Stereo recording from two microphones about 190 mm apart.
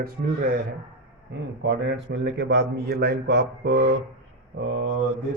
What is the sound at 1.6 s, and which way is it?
A man's voice, 70° right (ahead or behind).